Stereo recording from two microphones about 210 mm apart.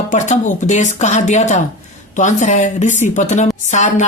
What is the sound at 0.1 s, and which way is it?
Speech, 35° left (ahead or behind).